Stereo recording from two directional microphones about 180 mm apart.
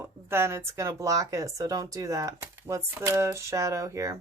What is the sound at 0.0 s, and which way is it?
Speech, 15° right (ahead or behind).